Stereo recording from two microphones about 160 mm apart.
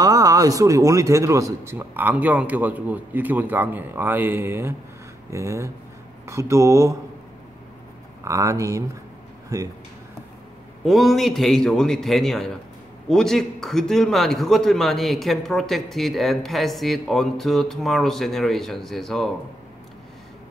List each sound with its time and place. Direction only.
0.0 s a man's voice: 20° right (ahead or behind)
8.2 s speech: 20° right (ahead or behind)
10.9 s a man's voice: centre (ahead or behind)